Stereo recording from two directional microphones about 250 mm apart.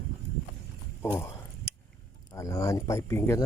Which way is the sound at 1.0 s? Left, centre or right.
Centre.